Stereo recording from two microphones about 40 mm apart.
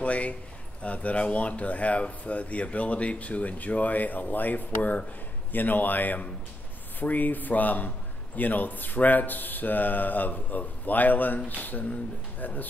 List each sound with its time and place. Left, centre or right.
0.0 s speech: left